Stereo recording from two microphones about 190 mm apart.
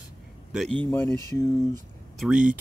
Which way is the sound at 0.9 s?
10° left (ahead or behind).